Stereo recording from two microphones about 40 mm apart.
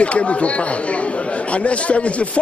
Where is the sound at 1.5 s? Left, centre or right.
Left.